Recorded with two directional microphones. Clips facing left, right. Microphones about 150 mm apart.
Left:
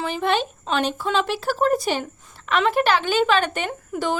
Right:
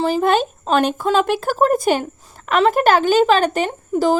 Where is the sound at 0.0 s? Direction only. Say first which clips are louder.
Right 6 dB; 40° right (ahead or behind).